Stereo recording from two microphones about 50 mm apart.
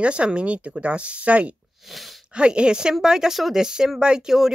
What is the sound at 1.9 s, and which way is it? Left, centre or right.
Speech, centre.